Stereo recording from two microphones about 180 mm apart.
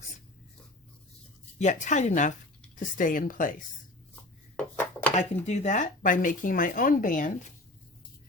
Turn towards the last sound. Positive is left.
turn(degrees=45)  # may be behind; listen again after turning